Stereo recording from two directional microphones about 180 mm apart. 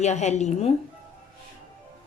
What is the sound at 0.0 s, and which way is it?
Speech, 40° left (ahead or behind).